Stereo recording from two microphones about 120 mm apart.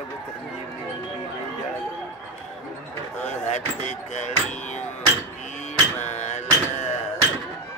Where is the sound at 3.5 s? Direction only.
70° left (ahead or behind).